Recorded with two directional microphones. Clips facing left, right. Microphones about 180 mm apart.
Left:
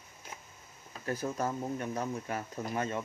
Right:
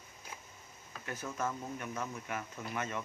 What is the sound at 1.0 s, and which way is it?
Speech, 35° left (ahead or behind).